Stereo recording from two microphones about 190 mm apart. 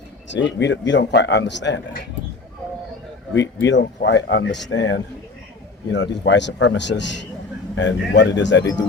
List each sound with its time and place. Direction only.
0.3 s speech: 70° left (ahead or behind)
3.3 s speech: 70° left (ahead or behind)